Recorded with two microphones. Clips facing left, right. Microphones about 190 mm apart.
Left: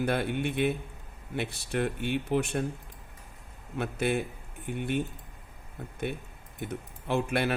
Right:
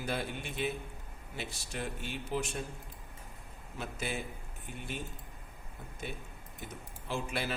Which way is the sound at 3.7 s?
60° left (ahead or behind).